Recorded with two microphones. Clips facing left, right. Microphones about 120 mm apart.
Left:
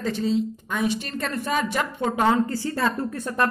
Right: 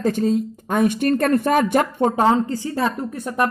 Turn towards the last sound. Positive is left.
turn(degrees=-15)  # may be behind; listen again after turning